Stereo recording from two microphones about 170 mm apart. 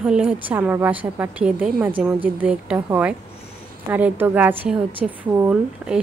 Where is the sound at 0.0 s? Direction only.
5° right (ahead or behind).